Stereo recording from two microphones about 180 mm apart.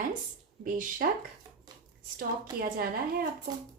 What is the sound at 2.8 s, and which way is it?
Speech, 55° right (ahead or behind).